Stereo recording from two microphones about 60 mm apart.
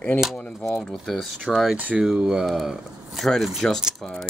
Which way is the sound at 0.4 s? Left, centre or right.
Centre.